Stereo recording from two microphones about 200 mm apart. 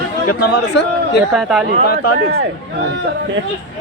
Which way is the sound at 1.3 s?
Centre (ahead or behind).